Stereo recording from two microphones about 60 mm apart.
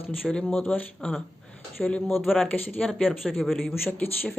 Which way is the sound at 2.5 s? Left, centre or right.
Left.